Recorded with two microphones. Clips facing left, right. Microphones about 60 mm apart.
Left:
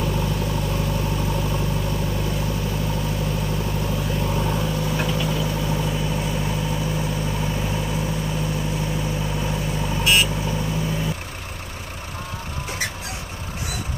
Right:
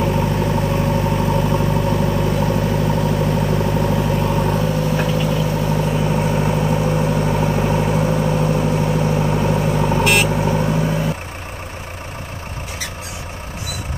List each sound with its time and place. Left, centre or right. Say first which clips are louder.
0.0 s vehicle: right 6 dB; right